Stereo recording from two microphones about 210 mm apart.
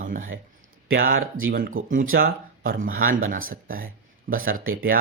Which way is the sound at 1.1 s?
70° right (ahead or behind).